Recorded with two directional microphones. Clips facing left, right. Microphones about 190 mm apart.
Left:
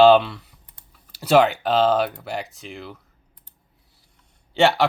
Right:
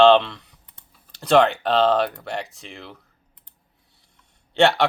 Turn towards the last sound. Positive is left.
turn(degrees=0)  # may be behind; listen again after turning